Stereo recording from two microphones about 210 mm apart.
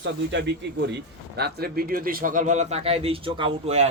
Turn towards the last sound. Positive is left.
turn(degrees=-25)  # may be behind; listen again after turning